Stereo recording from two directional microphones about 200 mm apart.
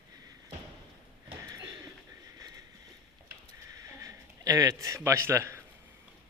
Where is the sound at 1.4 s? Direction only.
15° right (ahead or behind).